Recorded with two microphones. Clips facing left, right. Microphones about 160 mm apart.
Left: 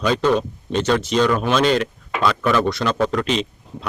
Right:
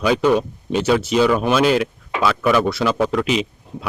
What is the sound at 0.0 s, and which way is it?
Speech, 10° right (ahead or behind).